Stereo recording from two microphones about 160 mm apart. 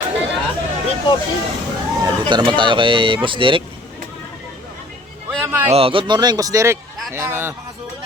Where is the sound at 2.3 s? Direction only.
30° right (ahead or behind).